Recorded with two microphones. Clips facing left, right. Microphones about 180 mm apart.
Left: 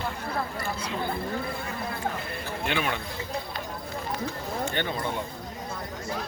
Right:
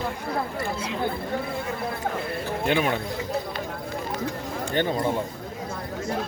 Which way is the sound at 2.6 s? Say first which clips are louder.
Right 5 dB; 40° right (ahead or behind).